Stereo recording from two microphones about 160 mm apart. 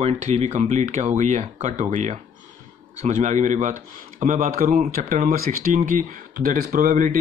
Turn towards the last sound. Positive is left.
turn(degrees=-55)  # may be behind; listen again after turning